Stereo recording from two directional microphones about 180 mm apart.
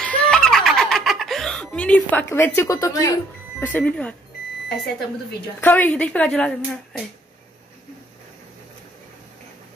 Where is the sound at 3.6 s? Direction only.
10° left (ahead or behind).